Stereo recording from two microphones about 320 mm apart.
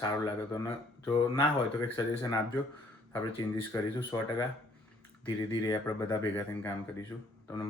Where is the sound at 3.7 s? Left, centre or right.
Centre.